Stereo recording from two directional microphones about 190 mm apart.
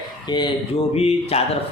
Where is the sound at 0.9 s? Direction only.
30° left (ahead or behind).